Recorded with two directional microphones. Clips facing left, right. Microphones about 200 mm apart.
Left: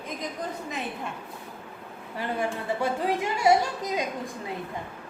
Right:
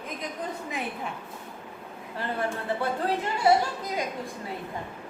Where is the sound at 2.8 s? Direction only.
10° left (ahead or behind).